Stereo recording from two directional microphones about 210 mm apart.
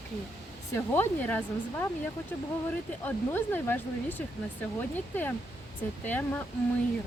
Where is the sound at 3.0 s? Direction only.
10° left (ahead or behind).